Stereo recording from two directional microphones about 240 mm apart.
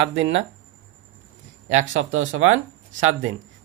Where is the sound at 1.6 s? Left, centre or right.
Right.